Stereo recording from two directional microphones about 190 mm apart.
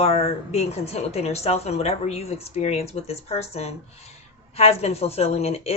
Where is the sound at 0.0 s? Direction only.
30° left (ahead or behind).